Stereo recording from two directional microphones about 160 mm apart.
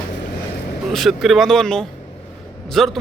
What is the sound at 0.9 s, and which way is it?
A man's voice, centre (ahead or behind).